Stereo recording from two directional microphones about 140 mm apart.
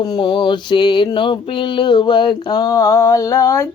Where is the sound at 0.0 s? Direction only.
30° left (ahead or behind).